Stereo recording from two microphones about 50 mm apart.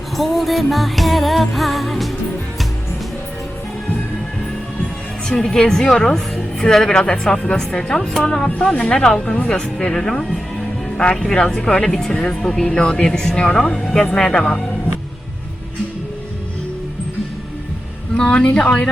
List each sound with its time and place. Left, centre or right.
0.2 s music: centre
5.3 s a woman's voice: centre
12.8 s speech: left
13.1 s a woman's voice: centre
13.3 s speech: left
13.7 s a woman's voice: centre
18.2 s speech: centre